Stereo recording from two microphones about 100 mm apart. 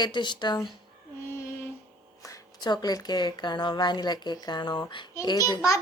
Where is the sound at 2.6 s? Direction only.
45° left (ahead or behind).